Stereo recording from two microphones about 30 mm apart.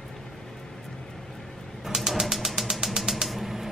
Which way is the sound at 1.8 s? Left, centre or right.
Centre.